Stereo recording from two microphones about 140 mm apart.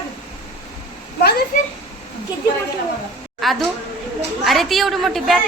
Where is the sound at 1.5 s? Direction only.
65° left (ahead or behind).